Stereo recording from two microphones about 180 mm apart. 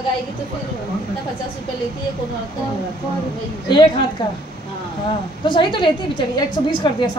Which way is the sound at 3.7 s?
25° left (ahead or behind).